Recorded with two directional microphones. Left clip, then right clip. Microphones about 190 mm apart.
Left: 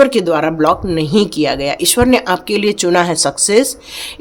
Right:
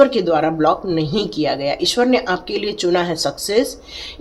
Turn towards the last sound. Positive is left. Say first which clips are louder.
# left 5 dB
turn(degrees=45)  # may be behind; listen again after turning